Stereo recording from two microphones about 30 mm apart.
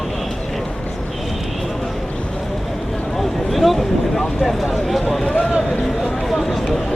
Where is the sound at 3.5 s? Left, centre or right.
Centre.